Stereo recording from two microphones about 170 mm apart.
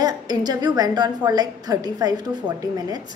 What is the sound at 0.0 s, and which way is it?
A woman's voice, 25° right (ahead or behind).